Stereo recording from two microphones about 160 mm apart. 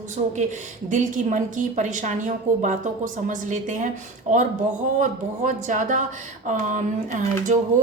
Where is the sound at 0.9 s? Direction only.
50° right (ahead or behind).